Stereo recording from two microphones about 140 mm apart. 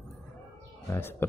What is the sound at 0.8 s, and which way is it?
Speech, 15° left (ahead or behind).